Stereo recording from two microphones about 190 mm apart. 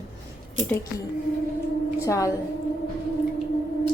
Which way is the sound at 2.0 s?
15° left (ahead or behind).